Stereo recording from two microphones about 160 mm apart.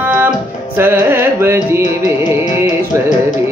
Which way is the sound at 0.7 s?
15° right (ahead or behind).